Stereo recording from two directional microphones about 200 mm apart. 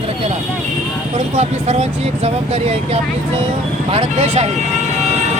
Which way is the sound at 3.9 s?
30° right (ahead or behind).